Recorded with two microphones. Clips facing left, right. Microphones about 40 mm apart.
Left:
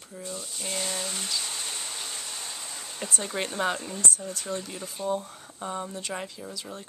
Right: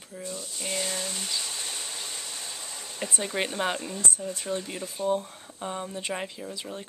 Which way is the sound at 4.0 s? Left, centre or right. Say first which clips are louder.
Even; right.